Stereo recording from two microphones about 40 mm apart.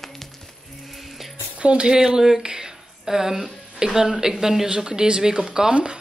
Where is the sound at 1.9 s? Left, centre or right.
Centre.